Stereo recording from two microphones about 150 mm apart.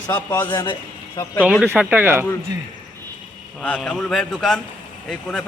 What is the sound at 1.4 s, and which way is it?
Speech, 5° right (ahead or behind).